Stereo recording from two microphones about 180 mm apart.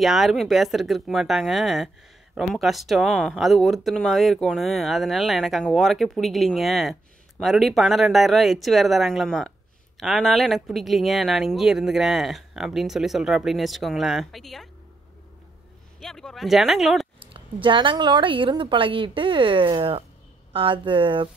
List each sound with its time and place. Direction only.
0.0 s speech: centre (ahead or behind)
16.0 s speech: centre (ahead or behind)
17.2 s speech: 30° right (ahead or behind)